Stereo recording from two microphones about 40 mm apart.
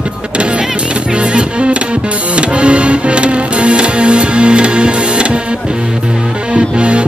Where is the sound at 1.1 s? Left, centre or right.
Right.